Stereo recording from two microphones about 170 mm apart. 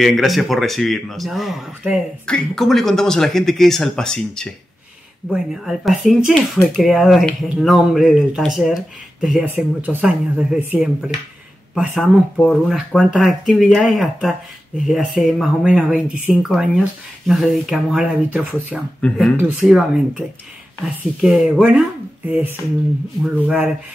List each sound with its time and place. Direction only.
0.0 s speech: centre (ahead or behind)
14.9 s speech: centre (ahead or behind)
18.9 s speech: 5° left (ahead or behind)
19.3 s speech: 10° right (ahead or behind)
23.2 s speech: 10° right (ahead or behind)